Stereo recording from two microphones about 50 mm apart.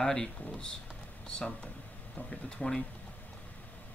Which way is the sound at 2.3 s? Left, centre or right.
Centre.